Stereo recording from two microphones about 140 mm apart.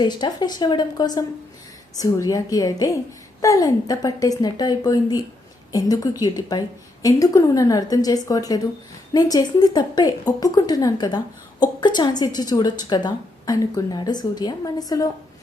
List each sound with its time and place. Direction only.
0.0 s a woman's voice: 30° left (ahead or behind)